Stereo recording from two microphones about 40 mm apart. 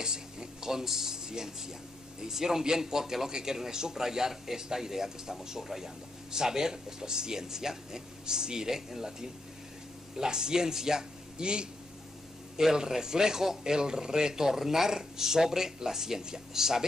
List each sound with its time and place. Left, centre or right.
0.0 s speech: centre